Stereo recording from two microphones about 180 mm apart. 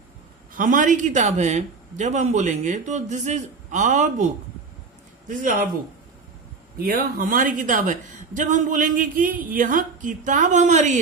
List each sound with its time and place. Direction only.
0.5 s a man's voice: 50° right (ahead or behind)
5.3 s a woman's voice: 45° right (ahead or behind)
6.7 s a woman's voice: 55° right (ahead or behind)